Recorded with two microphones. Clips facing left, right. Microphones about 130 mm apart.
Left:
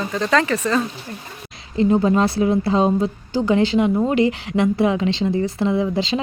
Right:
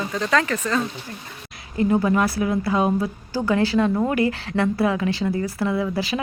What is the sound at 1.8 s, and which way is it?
A woman's voice, 25° left (ahead or behind).